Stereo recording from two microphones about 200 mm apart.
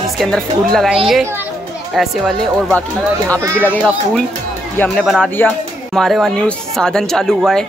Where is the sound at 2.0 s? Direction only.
Centre (ahead or behind).